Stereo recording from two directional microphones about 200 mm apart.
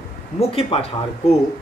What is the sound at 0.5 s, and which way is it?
Speech, 30° left (ahead or behind).